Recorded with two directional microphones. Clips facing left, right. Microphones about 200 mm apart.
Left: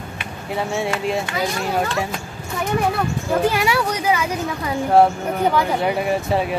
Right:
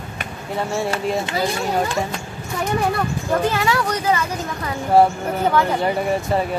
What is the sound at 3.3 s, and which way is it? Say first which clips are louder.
Speech: left 1 dB; 10° left (ahead or behind).